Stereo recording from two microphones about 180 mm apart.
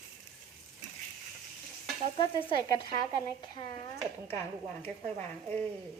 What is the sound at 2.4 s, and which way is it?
Frying, 25° left (ahead or behind).